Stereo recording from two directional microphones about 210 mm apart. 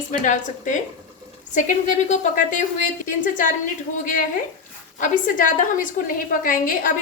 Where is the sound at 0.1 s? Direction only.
35° left (ahead or behind).